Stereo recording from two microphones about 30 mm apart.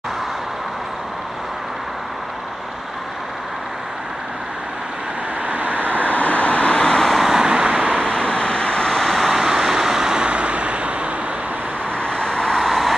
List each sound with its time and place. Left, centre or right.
5.5 s vehicle: right
6.1 s vehicle: left
7.1 s vehicle: centre
7.3 s vehicle: right
8.0 s vehicle: left
9.1 s vehicle: centre
10.2 s vehicle: right
12.1 s vehicle: left
12.5 s vehicle: centre